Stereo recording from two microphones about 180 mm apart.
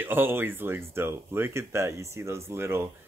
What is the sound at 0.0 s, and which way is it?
Speech, 10° right (ahead or behind).